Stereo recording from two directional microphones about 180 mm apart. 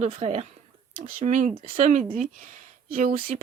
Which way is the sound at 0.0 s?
35° right (ahead or behind).